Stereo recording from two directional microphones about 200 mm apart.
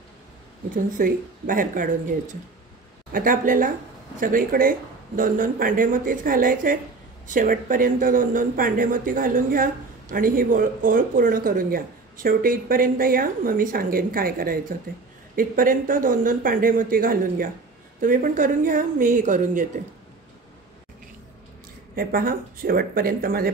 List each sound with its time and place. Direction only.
0.9 s speech: 45° right (ahead or behind)
21.9 s speech: 45° right (ahead or behind)